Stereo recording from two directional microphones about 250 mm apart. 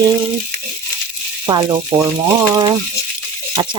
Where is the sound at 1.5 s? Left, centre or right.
Centre.